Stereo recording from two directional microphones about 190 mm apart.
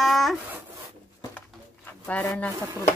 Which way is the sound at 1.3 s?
10° left (ahead or behind).